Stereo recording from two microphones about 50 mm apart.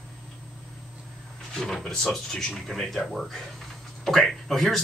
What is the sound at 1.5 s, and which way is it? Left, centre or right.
Speech, centre.